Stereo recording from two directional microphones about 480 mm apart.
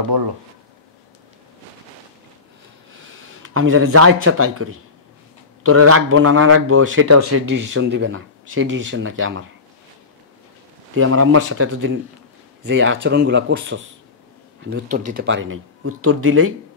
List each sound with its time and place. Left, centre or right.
3.4 s a man's voice: right
11.0 s a man's voice: right